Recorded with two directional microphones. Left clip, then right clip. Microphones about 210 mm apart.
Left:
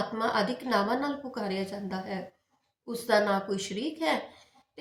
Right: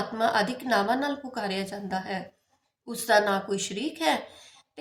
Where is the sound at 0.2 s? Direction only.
50° right (ahead or behind).